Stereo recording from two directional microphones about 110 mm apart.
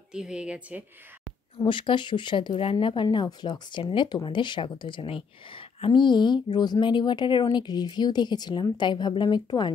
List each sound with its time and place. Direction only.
0.1 s a woman's voice: 5° right (ahead or behind)
1.6 s a woman's voice: 45° left (ahead or behind)